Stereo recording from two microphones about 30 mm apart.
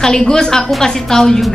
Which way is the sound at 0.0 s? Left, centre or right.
Centre.